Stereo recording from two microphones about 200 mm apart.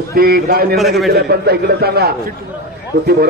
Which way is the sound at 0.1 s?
50° right (ahead or behind).